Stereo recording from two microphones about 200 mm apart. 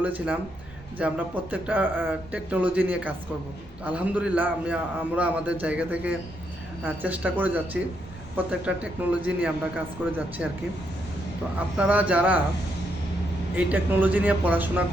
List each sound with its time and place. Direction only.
0.9 s a man's voice: 5° right (ahead or behind)
11.8 s a man's voice: 5° right (ahead or behind)
13.6 s a man's voice: 5° right (ahead or behind)